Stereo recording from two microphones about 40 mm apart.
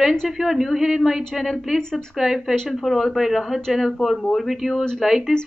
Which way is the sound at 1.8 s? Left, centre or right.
Centre.